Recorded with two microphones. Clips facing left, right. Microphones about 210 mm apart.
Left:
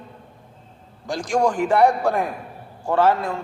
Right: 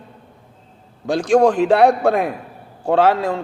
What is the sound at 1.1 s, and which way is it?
A man's voice, 60° right (ahead or behind).